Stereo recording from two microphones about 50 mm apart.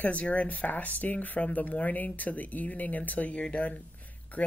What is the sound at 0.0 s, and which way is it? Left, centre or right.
Speech, left.